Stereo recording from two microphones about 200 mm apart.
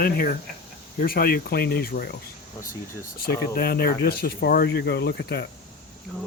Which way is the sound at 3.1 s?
50° left (ahead or behind).